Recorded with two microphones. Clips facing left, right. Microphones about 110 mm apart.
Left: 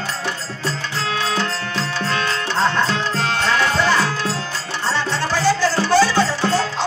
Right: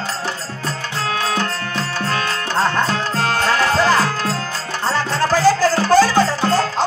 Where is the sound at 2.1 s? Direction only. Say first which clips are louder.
Right 1 dB; 45° right (ahead or behind).